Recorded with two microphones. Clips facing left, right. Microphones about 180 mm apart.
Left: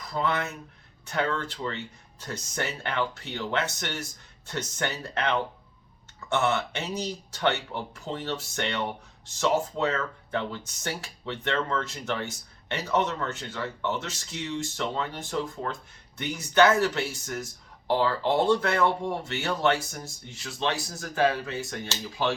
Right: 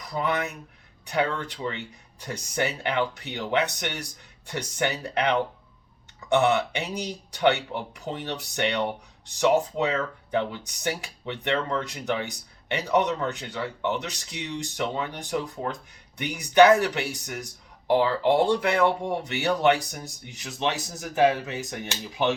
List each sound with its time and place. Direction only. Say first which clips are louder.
0.1 s speech: right 1 dB; 15° right (ahead or behind)